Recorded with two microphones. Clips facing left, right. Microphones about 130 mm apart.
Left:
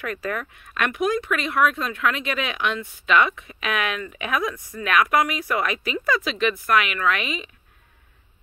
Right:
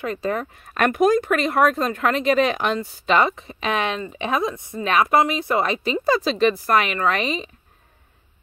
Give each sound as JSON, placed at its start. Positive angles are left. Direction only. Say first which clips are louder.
{"t": 0.0, "sound": "speech", "louder": "right 4 dB", "side_deg": -25}